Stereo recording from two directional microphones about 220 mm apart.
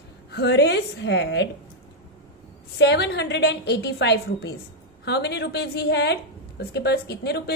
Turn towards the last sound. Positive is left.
turn(degrees=50)  # may be behind; listen again after turning